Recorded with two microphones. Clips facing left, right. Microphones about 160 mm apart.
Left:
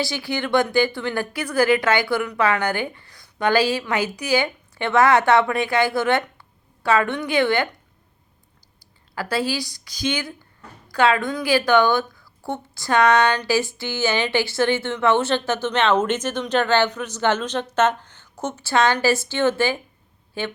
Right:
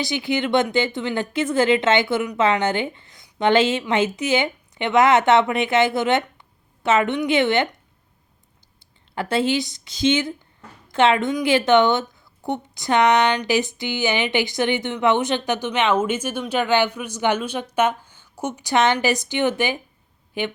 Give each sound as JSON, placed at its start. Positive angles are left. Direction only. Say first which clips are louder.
{"t": 0.0, "sound": "a woman's voice", "louder": "right 2 dB", "side_deg": -20}
{"t": 8.8, "sound": "speech", "louder": "right 2 dB", "side_deg": -25}